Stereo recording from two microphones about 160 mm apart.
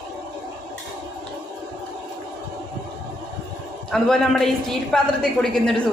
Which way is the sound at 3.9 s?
Centre (ahead or behind).